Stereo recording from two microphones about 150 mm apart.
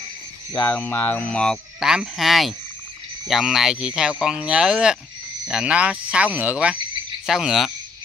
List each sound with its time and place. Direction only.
0.5 s speech: 25° left (ahead or behind)
0.7 s speech: 10° left (ahead or behind)